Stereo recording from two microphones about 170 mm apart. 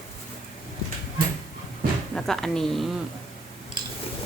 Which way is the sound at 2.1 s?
5° left (ahead or behind).